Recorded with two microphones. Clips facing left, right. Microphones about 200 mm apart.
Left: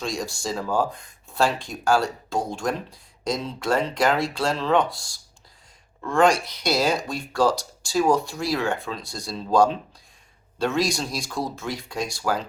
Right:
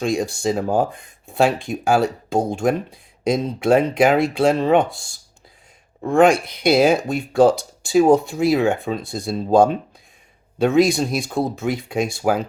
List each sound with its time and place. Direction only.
0.0 s speech: 55° right (ahead or behind)
10.8 s speech: 55° right (ahead or behind)